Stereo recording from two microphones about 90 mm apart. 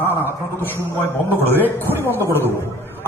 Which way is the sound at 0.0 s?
25° left (ahead or behind).